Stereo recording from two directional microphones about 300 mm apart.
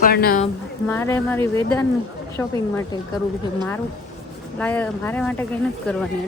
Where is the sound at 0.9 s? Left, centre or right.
Centre.